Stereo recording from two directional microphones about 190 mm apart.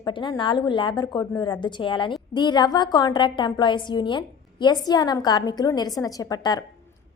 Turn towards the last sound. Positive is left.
turn(degrees=20)  # may be behind; listen again after turning